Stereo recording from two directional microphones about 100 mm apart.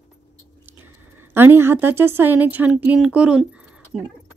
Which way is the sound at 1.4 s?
20° right (ahead or behind).